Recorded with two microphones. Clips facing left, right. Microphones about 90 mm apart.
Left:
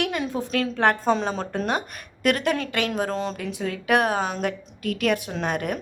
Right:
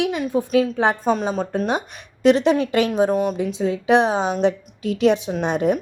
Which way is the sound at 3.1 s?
10° right (ahead or behind).